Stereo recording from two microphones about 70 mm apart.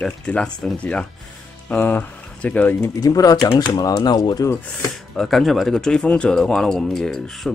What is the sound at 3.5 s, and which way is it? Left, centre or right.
Speech, left.